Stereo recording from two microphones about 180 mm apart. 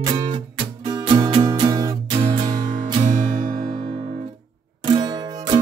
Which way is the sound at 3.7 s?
30° right (ahead or behind).